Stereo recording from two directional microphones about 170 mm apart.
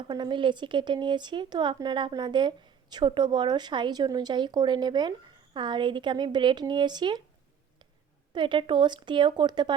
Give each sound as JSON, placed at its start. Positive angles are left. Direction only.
{"t": 0.0, "sound": "speech", "side_deg": -25}
{"t": 8.3, "sound": "speech", "side_deg": -30}